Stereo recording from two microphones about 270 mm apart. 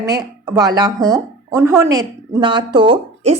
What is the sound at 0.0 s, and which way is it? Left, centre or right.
A woman's voice, centre.